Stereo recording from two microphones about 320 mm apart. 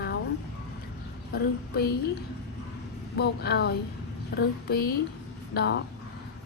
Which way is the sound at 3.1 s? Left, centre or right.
Left.